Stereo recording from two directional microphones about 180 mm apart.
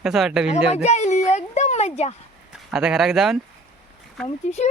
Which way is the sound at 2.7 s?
5° right (ahead or behind).